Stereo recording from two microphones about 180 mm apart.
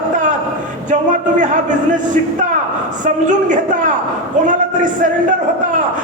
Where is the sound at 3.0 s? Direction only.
45° right (ahead or behind).